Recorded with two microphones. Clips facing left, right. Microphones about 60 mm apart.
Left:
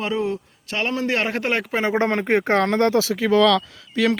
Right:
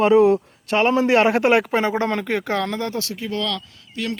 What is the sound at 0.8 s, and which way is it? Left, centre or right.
Speech, centre.